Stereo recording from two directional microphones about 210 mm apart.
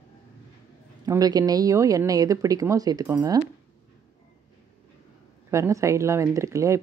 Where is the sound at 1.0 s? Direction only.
15° right (ahead or behind).